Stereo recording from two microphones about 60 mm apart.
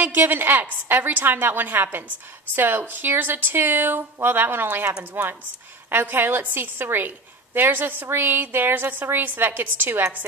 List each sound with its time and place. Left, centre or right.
0.0 s a woman's voice: right